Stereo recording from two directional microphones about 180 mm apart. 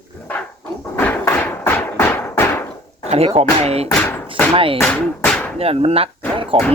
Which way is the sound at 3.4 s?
35° right (ahead or behind).